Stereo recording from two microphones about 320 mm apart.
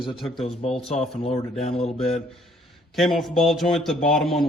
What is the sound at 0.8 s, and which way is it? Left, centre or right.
Mantra, centre.